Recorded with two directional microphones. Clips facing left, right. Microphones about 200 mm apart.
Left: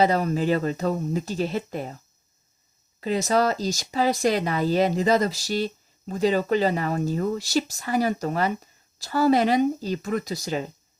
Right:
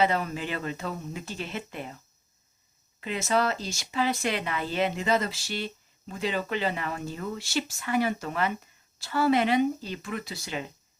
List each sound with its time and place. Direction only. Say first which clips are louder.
0.0 s speech: left 5 dB; 40° left (ahead or behind)
3.0 s speech: left 5 dB; 35° left (ahead or behind)